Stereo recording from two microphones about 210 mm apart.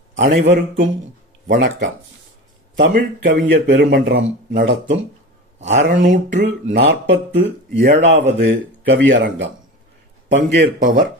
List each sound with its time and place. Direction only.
0.2 s speech: 45° right (ahead or behind)
1.5 s speech: 60° right (ahead or behind)
10.8 s speech: 40° right (ahead or behind)